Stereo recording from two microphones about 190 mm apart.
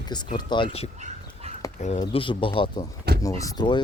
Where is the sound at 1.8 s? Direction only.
35° left (ahead or behind).